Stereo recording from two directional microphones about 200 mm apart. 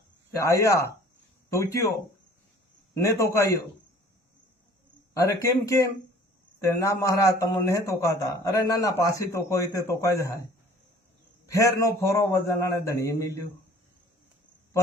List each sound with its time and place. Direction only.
0.3 s a man's voice: 15° left (ahead or behind)
3.0 s a man's voice: 15° left (ahead or behind)
5.1 s a man's voice: 15° left (ahead or behind)
11.5 s a man's voice: 15° left (ahead or behind)